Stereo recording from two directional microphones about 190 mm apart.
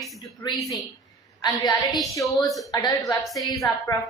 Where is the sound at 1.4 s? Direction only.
20° left (ahead or behind).